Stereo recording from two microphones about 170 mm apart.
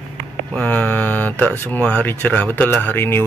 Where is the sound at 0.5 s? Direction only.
10° left (ahead or behind).